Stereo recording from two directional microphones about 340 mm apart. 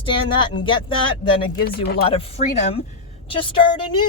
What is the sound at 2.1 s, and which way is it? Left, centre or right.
Speech, centre.